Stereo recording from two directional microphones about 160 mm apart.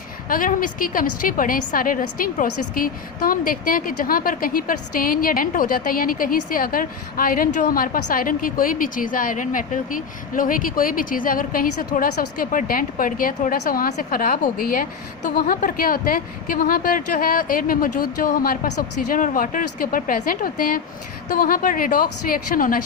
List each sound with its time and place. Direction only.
0.3 s a woman's voice: 60° left (ahead or behind)